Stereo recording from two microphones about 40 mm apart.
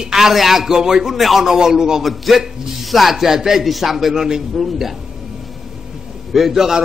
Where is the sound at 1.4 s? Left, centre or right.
Centre.